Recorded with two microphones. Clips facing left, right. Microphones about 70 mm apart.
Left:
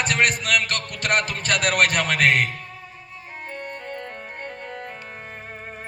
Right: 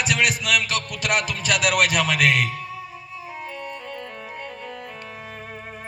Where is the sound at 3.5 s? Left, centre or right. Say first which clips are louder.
Even; left.